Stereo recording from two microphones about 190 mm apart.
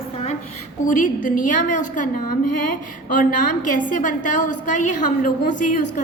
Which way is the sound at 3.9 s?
40° left (ahead or behind).